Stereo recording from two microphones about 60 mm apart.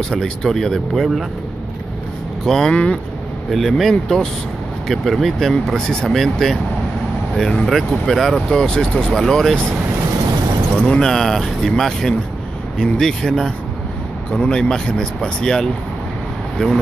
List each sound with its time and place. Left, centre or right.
0.1 s speech: centre
2.4 s speech: centre
2.7 s speech: centre
3.4 s speech: centre
10.8 s speech: centre